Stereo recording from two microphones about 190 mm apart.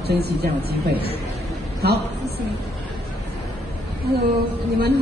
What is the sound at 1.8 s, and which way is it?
Speech, 55° right (ahead or behind).